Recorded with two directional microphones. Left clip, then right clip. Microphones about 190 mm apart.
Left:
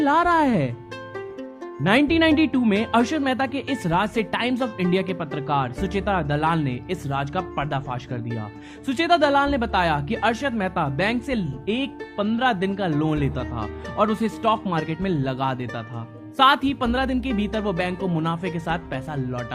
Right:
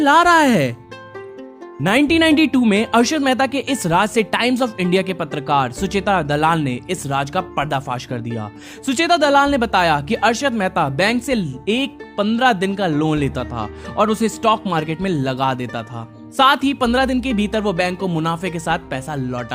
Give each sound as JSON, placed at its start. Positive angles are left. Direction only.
{"t": 0.0, "sound": "speech", "side_deg": -30}
{"t": 1.8, "sound": "speech", "side_deg": -30}